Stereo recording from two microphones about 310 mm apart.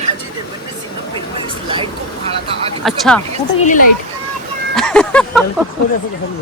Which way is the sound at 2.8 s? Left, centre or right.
Centre.